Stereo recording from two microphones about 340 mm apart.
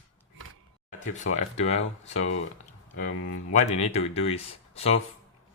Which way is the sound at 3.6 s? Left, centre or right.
Centre.